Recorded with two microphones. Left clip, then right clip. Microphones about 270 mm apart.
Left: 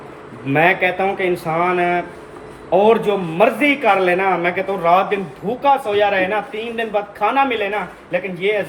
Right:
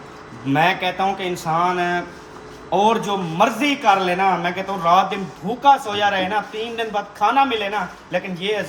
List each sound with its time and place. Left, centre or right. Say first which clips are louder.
0.5 s a man's voice: left 3 dB; centre